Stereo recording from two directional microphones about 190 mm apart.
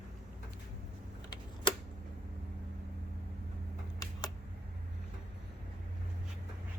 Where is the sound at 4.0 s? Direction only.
20° left (ahead or behind).